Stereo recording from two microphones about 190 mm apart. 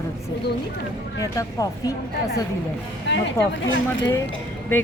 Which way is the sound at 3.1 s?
65° left (ahead or behind).